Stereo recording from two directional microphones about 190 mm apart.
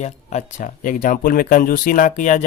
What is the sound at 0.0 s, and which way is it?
Speech, 40° left (ahead or behind).